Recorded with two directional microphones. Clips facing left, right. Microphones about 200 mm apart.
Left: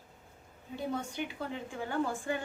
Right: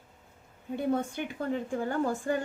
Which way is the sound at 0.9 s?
50° right (ahead or behind).